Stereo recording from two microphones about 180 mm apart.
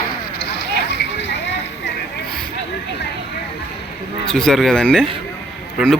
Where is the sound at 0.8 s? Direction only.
75° left (ahead or behind).